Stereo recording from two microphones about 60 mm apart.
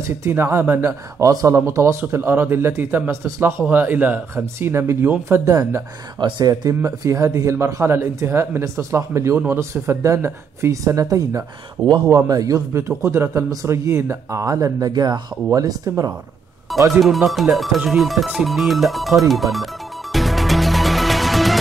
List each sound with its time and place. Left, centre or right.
0.3 s a man's voice: right
1.2 s speech: right
1.7 s speech: right
2.0 s a man's voice: right
3.6 s speech: right
4.6 s a man's voice: right
5.4 s speech: right
6.1 s a man's voice: right
11.0 s speech: right
12.3 s speech: right
13.0 s a man's voice: right
14.4 s speech: right
16.7 s speech: centre
17.7 s music: centre